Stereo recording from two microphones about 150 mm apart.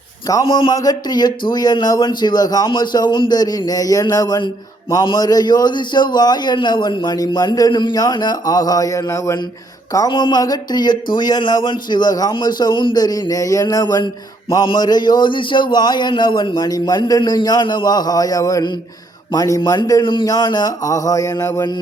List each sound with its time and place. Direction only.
0.4 s a man's voice: 35° left (ahead or behind)